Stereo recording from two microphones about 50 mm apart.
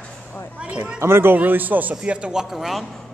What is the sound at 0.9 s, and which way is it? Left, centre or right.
Speech, right.